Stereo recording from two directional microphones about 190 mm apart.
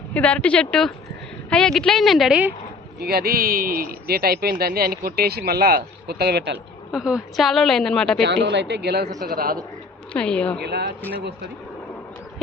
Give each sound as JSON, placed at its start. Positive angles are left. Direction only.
{"t": 0.1, "sound": "a woman's voice", "side_deg": 5}
{"t": 3.0, "sound": "speech", "side_deg": -55}
{"t": 6.9, "sound": "a woman's voice", "side_deg": -5}
{"t": 8.2, "sound": "speech", "side_deg": -65}
{"t": 10.1, "sound": "a woman's voice", "side_deg": 5}
{"t": 10.6, "sound": "speech", "side_deg": -60}